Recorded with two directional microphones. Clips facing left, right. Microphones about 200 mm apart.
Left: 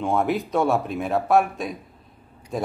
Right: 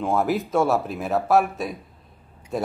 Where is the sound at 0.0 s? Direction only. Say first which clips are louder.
Even; centre (ahead or behind).